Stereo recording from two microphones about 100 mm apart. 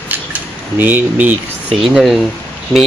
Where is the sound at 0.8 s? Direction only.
15° right (ahead or behind).